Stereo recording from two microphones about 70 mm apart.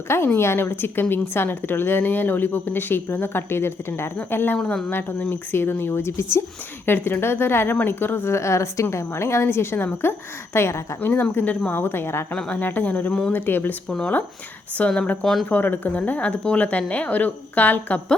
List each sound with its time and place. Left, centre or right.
0.3 s a woman's voice: left
4.5 s speech: centre
4.9 s a woman's voice: left
11.0 s a woman's voice: left
12.3 s a woman's voice: centre
14.8 s a woman's voice: centre
15.2 s speech: centre
15.4 s a woman's voice: left